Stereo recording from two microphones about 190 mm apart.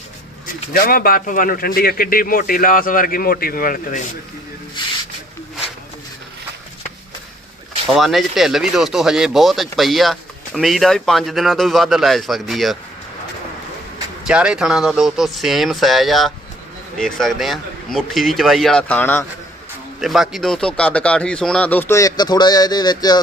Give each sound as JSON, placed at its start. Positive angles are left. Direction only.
{"t": 0.7, "sound": "a man's voice", "side_deg": 50}
{"t": 4.8, "sound": "speech", "side_deg": 25}
{"t": 7.9, "sound": "speech", "side_deg": 0}
{"t": 14.3, "sound": "speech", "side_deg": -5}